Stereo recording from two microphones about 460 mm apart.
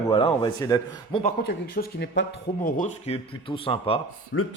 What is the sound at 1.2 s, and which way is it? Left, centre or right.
Speech, centre.